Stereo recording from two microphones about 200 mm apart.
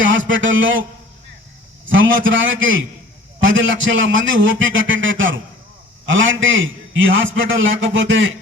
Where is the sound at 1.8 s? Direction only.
70° right (ahead or behind).